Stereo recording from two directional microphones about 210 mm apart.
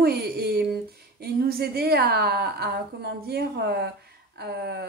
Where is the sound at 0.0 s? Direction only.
45° right (ahead or behind).